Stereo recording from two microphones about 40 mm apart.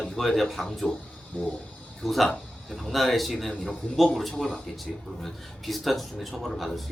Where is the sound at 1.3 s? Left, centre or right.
Left.